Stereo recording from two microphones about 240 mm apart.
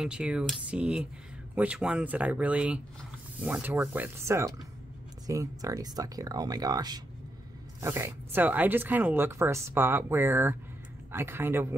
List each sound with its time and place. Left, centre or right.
0.0 s speech: centre